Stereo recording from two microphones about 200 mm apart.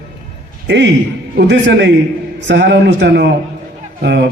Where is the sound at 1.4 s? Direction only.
60° right (ahead or behind).